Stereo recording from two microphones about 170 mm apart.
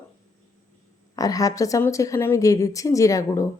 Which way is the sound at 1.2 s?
20° left (ahead or behind).